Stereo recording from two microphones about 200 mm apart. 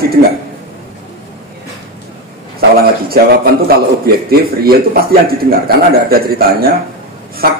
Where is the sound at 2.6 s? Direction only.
50° right (ahead or behind).